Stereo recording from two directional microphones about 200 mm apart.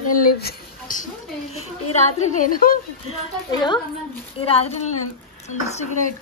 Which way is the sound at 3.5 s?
20° left (ahead or behind).